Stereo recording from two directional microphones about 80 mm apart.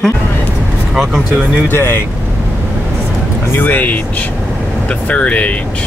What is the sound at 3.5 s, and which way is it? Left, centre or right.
Speech, left.